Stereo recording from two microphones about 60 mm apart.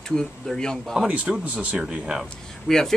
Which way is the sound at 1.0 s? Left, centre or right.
Right.